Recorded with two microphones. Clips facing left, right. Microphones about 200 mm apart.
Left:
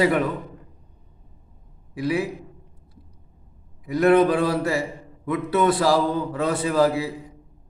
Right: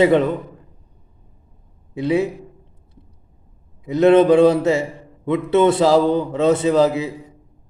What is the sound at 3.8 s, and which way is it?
A man's voice, 25° right (ahead or behind).